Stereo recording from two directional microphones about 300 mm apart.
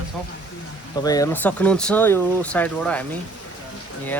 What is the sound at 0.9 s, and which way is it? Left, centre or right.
Speech, centre.